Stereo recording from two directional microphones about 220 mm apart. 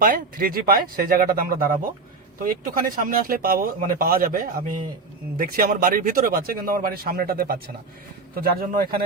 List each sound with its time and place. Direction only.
0.0 s speech: 40° right (ahead or behind)